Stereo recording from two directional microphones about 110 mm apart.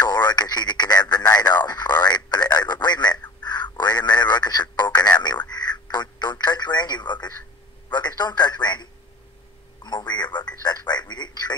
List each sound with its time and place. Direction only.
0.0 s radio: 40° left (ahead or behind)
3.7 s a sound: 40° left (ahead or behind)
5.5 s telephone: 40° left (ahead or behind)
9.8 s telephone: 40° left (ahead or behind)